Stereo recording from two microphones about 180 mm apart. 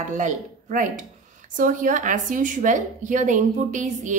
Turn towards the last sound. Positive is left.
turn(degrees=-45)  # may be behind; listen again after turning